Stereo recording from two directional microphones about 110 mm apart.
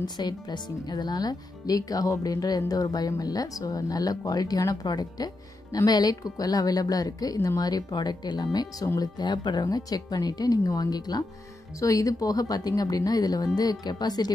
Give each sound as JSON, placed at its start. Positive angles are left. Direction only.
{"t": 0.0, "sound": "speech", "side_deg": 40}